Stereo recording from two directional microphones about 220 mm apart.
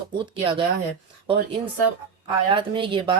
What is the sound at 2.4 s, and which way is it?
Speech, 20° right (ahead or behind).